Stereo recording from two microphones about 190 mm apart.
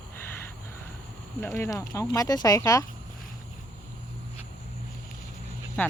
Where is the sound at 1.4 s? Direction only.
15° left (ahead or behind).